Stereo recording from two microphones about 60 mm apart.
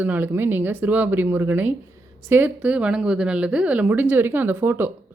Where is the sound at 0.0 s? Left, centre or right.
Right.